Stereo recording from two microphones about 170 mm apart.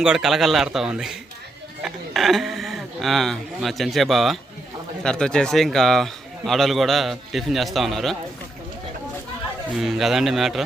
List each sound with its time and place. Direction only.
0.0 s speech: 5° right (ahead or behind)
9.7 s speech: centre (ahead or behind)